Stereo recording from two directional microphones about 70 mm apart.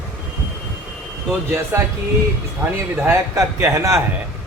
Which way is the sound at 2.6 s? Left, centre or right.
Right.